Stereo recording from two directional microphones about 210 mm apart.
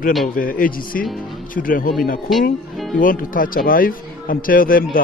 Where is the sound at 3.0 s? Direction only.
40° left (ahead or behind).